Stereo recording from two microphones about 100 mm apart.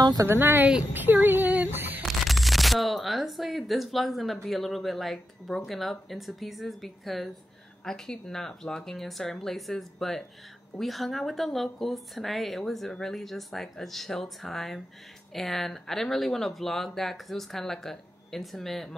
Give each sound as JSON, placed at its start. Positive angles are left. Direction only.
{"t": 0.0, "sound": "speech", "side_deg": -40}
{"t": 0.3, "sound": "speech", "side_deg": -20}
{"t": 0.9, "sound": "a sound", "side_deg": -20}
{"t": 2.0, "sound": "speech", "side_deg": 0}